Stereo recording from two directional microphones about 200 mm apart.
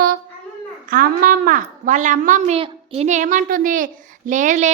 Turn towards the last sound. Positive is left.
turn(degrees=-40)  # may be behind; listen again after turning